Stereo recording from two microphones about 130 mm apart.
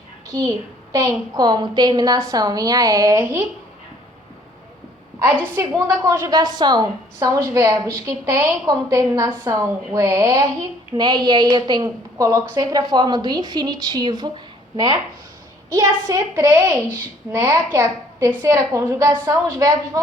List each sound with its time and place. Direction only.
0.3 s a child's voice: 30° right (ahead or behind)
5.7 s a woman's voice: 30° right (ahead or behind)